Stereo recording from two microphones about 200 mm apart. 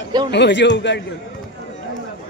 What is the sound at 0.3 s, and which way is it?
Speech, 60° left (ahead or behind).